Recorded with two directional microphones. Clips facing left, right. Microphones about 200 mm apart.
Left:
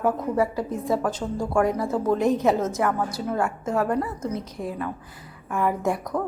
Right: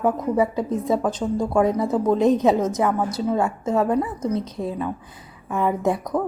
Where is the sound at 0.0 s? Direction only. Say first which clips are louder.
Right 2 dB; 20° right (ahead or behind).